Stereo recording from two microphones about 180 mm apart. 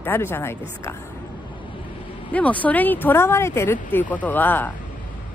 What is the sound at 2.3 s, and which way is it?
Speech, 10° left (ahead or behind).